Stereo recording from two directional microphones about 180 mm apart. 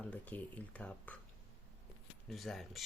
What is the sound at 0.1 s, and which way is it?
Speech, 10° left (ahead or behind).